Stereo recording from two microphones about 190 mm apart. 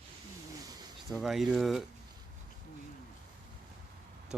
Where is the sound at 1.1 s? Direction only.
Centre (ahead or behind).